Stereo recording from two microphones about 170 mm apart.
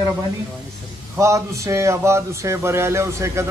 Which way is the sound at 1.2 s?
15° right (ahead or behind).